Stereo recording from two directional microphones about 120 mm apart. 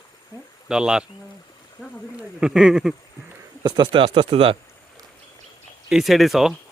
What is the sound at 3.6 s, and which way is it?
Speech, 45° right (ahead or behind).